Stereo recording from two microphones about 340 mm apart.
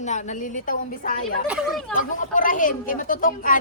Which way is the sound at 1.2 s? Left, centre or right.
Centre.